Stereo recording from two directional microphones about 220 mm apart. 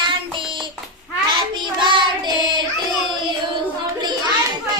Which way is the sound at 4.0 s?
20° right (ahead or behind).